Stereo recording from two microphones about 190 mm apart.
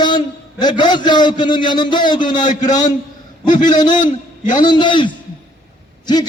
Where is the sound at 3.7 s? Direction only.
25° left (ahead or behind).